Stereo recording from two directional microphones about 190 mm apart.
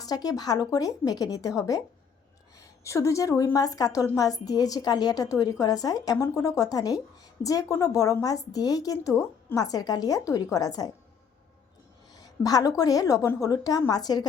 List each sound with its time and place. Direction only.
0.0 s a woman's voice: 20° left (ahead or behind)
2.8 s a woman's voice: 15° left (ahead or behind)
12.1 s a woman's voice: 20° left (ahead or behind)